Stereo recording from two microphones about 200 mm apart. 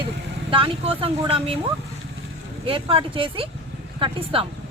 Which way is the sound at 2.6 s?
25° right (ahead or behind).